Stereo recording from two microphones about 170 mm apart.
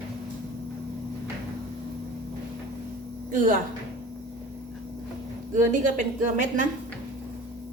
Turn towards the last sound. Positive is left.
turn(degrees=-50)  # may be behind; listen again after turning